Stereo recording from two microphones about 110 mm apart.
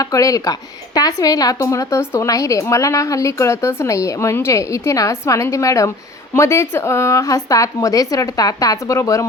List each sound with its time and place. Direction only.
0.0 s a woman's voice: 30° left (ahead or behind)